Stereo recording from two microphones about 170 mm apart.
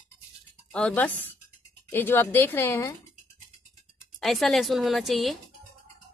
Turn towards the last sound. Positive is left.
turn(degrees=0)  # may be behind; listen again after turning